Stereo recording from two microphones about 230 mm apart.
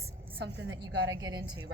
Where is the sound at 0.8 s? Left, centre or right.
Centre.